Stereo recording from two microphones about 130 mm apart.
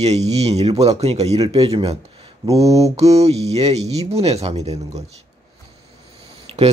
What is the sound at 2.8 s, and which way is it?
A man's voice, 55° right (ahead or behind).